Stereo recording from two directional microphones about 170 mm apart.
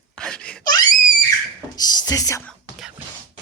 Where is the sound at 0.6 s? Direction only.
25° left (ahead or behind).